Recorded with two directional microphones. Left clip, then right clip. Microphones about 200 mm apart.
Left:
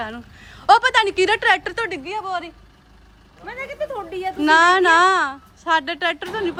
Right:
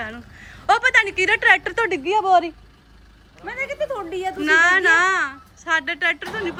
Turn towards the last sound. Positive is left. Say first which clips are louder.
# even
turn(degrees=5)  # may be behind; listen again after turning